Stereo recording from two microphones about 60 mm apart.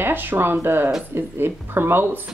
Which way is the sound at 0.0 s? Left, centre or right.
Right.